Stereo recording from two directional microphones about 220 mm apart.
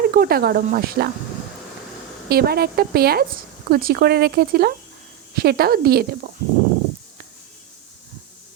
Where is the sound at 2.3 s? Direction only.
45° right (ahead or behind).